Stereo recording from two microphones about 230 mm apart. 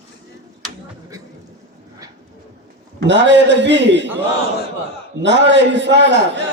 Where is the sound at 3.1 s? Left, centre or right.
Right.